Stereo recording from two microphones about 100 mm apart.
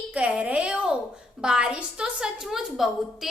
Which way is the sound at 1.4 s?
10° right (ahead or behind).